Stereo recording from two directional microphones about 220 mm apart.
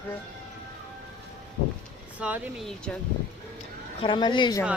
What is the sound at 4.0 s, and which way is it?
Speech, 20° left (ahead or behind).